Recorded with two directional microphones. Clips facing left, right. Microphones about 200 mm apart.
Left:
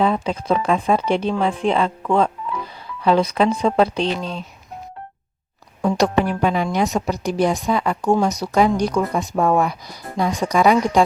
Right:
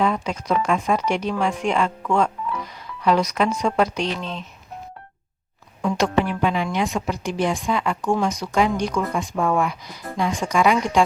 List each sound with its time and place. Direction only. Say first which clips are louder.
0.0 s speech: left 3 dB; 30° left (ahead or behind)
5.8 s speech: left 3 dB; 40° left (ahead or behind)